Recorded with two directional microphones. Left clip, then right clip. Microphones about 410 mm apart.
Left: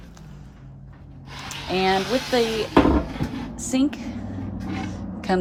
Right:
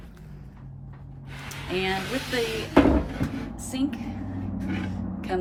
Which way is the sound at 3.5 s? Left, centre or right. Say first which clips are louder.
Left 9 dB; centre.